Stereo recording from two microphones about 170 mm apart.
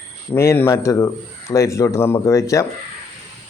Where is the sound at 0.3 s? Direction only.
15° left (ahead or behind).